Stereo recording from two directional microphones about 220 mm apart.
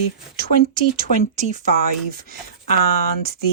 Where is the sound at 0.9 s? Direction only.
35° right (ahead or behind).